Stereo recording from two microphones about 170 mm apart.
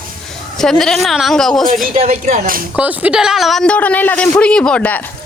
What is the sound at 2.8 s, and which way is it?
A man's voice, 10° right (ahead or behind).